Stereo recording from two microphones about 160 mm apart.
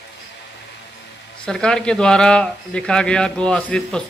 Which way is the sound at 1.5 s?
5° left (ahead or behind).